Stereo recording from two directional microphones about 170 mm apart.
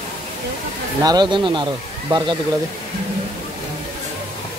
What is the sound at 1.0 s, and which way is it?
Speech, 25° right (ahead or behind).